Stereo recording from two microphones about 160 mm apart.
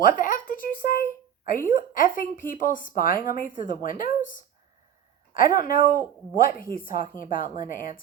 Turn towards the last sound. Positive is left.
turn(degrees=60)  # may be behind; listen again after turning